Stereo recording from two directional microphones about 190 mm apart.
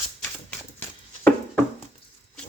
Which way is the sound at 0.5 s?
10° left (ahead or behind).